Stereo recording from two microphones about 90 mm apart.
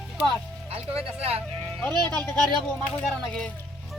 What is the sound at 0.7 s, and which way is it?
Speech, 90° right.